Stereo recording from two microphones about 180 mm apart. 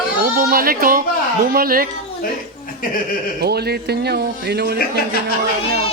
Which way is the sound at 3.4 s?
65° right (ahead or behind).